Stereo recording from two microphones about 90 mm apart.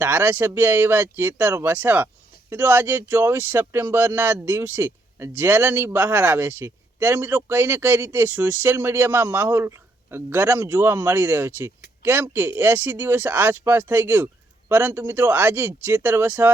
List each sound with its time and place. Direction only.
0.0 s speech: 25° right (ahead or behind)